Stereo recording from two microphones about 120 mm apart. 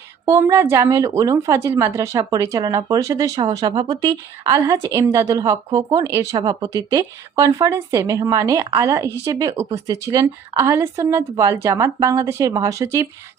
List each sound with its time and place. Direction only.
0.3 s a woman's voice: 20° right (ahead or behind)